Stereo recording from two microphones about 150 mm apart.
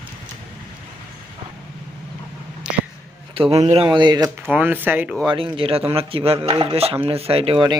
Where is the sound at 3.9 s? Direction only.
30° right (ahead or behind).